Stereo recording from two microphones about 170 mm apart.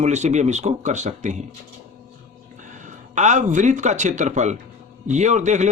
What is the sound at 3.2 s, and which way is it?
Speech, 45° right (ahead or behind).